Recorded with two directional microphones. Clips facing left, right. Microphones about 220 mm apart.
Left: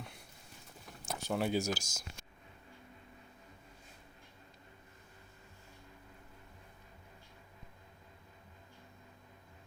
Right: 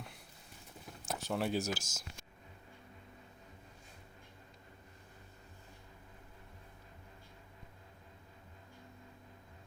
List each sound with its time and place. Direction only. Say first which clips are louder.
1.0 s speech: left 1 dB; centre (ahead or behind)